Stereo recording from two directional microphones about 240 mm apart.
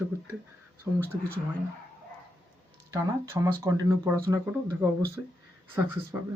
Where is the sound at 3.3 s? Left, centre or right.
Centre.